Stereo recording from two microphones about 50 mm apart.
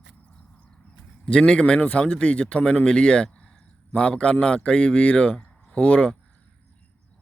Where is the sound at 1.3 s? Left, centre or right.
Centre.